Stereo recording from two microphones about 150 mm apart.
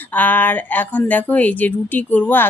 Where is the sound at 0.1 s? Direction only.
10° left (ahead or behind).